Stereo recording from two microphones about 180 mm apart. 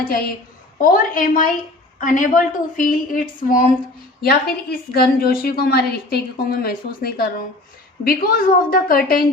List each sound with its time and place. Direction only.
0.8 s a woman's voice: 50° left (ahead or behind)